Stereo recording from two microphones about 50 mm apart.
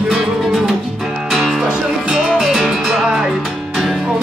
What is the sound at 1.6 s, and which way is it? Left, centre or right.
Music, centre.